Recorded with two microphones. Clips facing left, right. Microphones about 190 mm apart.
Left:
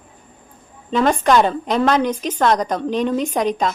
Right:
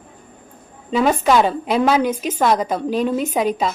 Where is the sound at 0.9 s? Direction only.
5° right (ahead or behind).